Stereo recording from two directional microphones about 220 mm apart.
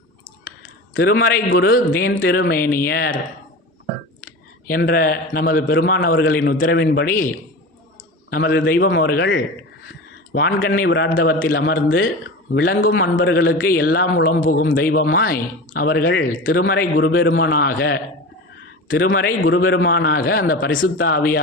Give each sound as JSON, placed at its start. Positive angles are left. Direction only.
{"t": 0.9, "sound": "a man's voice", "side_deg": 45}
{"t": 4.6, "sound": "a man's voice", "side_deg": 40}
{"t": 8.3, "sound": "a man's voice", "side_deg": 45}
{"t": 10.3, "sound": "a man's voice", "side_deg": 45}
{"t": 13.0, "sound": "a man's voice", "side_deg": 55}
{"t": 17.2, "sound": "a man's voice", "side_deg": 60}